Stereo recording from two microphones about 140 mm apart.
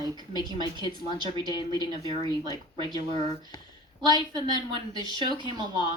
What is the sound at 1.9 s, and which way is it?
Speech, 30° right (ahead or behind).